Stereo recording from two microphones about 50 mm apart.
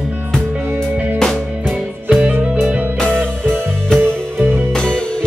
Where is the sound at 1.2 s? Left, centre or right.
Centre.